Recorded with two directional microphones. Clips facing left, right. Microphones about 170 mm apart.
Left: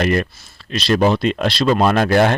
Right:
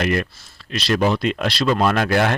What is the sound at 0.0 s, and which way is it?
Speech, 35° left (ahead or behind).